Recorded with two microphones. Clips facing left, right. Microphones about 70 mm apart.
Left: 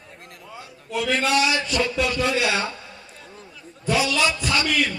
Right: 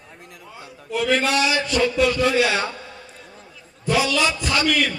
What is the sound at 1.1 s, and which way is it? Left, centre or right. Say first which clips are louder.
A man's voice: left 1 dB; right.